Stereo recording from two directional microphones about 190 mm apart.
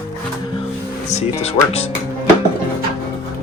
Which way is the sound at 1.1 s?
35° left (ahead or behind).